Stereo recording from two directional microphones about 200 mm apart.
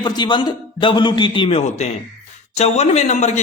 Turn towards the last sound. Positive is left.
turn(degrees=35)  # may be behind; listen again after turning